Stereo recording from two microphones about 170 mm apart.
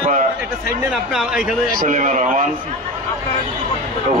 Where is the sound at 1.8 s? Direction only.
50° right (ahead or behind).